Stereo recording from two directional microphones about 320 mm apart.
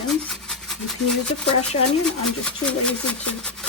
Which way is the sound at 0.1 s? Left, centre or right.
Centre.